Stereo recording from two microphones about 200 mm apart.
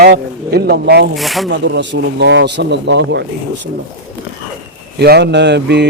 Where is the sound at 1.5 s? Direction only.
65° right (ahead or behind).